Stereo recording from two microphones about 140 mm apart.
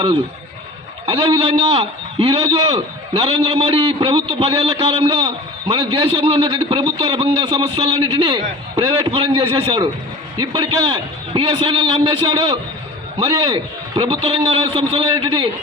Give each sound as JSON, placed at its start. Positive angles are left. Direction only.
{"t": 1.0, "sound": "a man's voice", "side_deg": -40}